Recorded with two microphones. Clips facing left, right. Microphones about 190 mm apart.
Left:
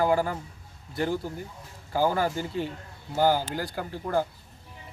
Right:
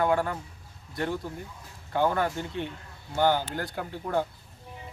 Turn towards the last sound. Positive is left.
turn(degrees=0)  # may be behind; listen again after turning